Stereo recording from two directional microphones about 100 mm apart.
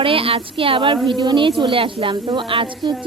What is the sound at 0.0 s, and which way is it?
Speech, 70° right (ahead or behind).